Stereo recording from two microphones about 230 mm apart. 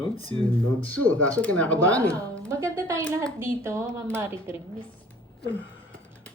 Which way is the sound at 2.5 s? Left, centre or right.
Centre.